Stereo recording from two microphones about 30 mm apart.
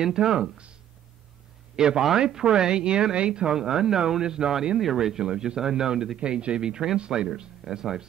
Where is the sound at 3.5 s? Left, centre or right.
Right.